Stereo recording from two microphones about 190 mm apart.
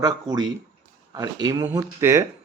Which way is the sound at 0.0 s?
20° right (ahead or behind).